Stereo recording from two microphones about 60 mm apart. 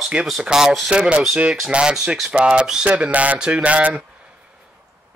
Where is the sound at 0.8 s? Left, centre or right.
Centre.